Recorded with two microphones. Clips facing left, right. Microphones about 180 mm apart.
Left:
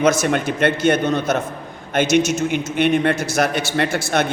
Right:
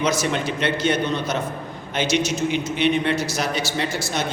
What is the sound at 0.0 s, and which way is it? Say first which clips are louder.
A man's voice: left 5 dB; 50° left (ahead or behind).